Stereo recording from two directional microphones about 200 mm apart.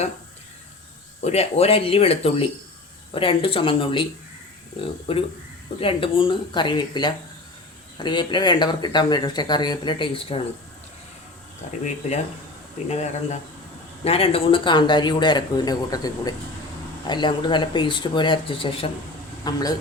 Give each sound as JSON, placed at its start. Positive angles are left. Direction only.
{"t": 1.2, "sound": "speech", "side_deg": 30}
{"t": 5.1, "sound": "speech", "side_deg": 30}
{"t": 11.6, "sound": "speech", "side_deg": 35}
{"t": 12.9, "sound": "speech", "side_deg": 35}